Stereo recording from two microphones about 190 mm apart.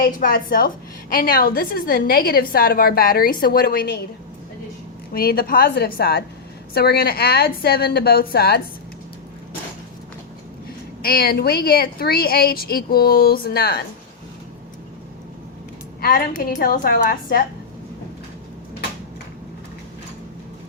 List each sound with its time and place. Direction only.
0.0 s a woman's voice: 50° left (ahead or behind)
5.1 s a woman's voice: 50° left (ahead or behind)
11.0 s a woman's voice: 55° left (ahead or behind)
16.0 s a woman's voice: 50° left (ahead or behind)